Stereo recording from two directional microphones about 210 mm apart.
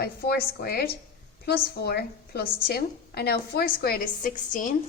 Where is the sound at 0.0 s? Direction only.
50° left (ahead or behind).